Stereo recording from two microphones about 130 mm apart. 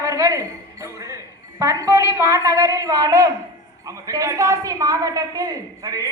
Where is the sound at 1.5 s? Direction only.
25° right (ahead or behind).